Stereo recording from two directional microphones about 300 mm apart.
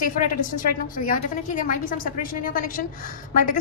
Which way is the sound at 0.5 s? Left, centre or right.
Left.